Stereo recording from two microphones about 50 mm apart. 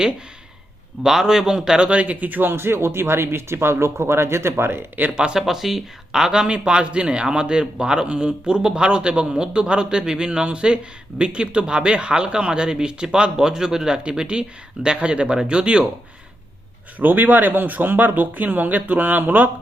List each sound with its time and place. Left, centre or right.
1.0 s a man's voice: centre; by 2.5 s right
2.5 s speech: right
5.1 s a man's voice: centre
5.4 s speech: centre
17.0 s speech: right